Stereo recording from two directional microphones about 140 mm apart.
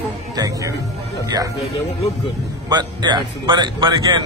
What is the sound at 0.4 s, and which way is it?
Speech, 25° right (ahead or behind).